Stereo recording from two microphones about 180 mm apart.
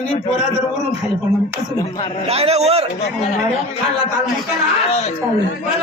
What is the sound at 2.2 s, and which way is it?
Speech, 35° right (ahead or behind).